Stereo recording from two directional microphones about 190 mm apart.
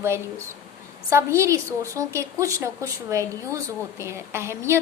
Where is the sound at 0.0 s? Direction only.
15° right (ahead or behind).